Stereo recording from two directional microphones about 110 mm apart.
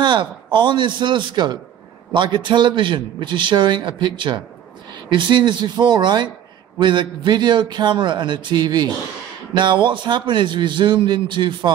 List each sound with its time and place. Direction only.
0.0 s a man's voice: 45° right (ahead or behind)